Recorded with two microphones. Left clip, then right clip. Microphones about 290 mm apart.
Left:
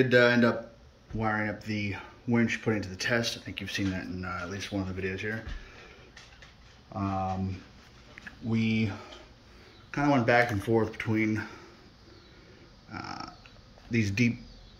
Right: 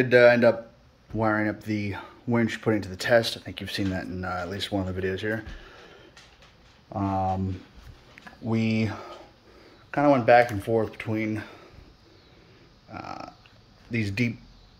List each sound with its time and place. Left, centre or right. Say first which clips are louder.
0.0 s speech: right 5 dB; centre
6.9 s speech: right 5 dB; right
8.5 s speech: right 3 dB; centre
12.9 s speech: right 2 dB; centre